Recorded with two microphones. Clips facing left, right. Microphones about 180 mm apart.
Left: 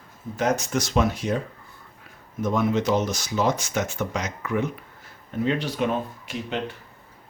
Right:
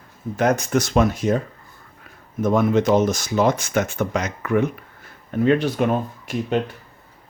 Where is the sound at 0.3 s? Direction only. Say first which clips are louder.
Right 5 dB; 55° right (ahead or behind).